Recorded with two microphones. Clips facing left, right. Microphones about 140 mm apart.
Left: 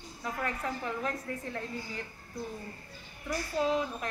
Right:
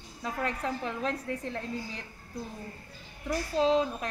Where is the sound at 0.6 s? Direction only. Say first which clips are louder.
Right 2 dB; 25° right (ahead or behind).